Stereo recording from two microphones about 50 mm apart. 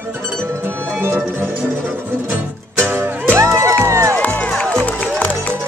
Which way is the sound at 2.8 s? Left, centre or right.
Right.